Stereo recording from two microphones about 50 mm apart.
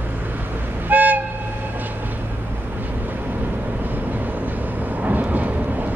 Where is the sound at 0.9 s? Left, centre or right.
Right.